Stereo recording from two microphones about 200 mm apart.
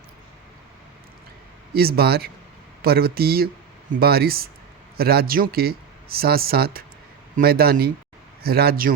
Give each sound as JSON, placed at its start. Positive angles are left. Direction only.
{"t": 1.7, "sound": "speech", "side_deg": -50}